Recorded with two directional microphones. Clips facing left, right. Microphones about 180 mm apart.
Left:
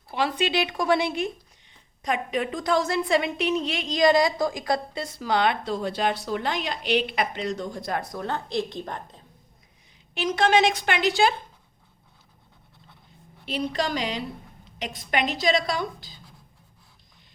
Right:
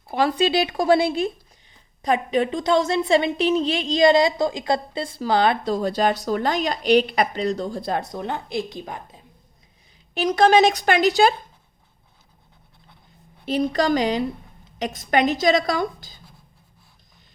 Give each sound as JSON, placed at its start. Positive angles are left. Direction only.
{"t": 0.1, "sound": "a woman's voice", "side_deg": -40}
{"t": 10.2, "sound": "speech", "side_deg": -40}
{"t": 13.4, "sound": "a woman's voice", "side_deg": -45}